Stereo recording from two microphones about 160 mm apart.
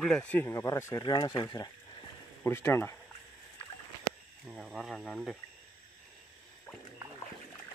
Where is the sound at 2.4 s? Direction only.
15° left (ahead or behind).